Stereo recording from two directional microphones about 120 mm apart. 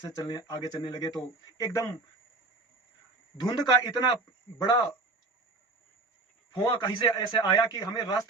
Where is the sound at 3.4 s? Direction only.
35° left (ahead or behind).